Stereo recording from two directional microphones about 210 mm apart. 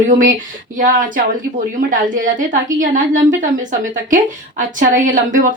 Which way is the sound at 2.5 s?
40° right (ahead or behind).